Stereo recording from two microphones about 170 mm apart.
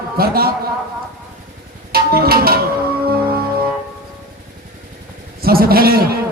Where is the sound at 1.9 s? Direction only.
65° right (ahead or behind).